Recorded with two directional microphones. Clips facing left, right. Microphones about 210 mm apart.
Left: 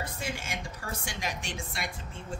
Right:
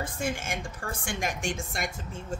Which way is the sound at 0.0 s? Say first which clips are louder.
Right 5 dB; 50° right (ahead or behind).